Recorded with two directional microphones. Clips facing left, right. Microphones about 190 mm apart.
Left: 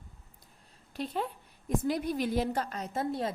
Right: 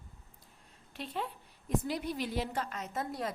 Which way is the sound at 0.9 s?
40° left (ahead or behind).